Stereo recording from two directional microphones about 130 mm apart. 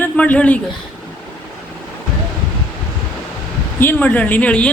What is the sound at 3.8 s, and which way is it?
Speech, 15° left (ahead or behind).